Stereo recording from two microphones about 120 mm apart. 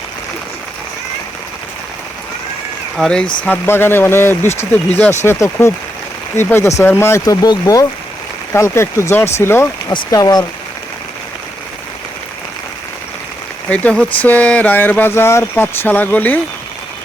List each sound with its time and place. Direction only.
3.0 s speech: 5° left (ahead or behind)
3.4 s speech: 15° left (ahead or behind)
7.4 s speech: 35° left (ahead or behind)
9.9 s speech: 30° left (ahead or behind)
13.7 s speech: 10° left (ahead or behind)